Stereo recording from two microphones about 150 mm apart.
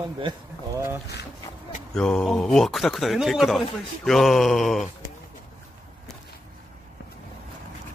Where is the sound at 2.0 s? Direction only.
5° left (ahead or behind).